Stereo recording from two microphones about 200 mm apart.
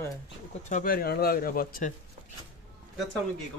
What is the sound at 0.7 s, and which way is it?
Speech, 45° left (ahead or behind).